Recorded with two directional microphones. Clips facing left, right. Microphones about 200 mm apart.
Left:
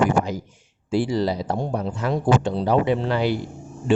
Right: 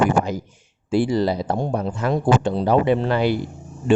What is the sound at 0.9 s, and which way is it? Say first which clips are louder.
Speech: right 2 dB; 55° right (ahead or behind).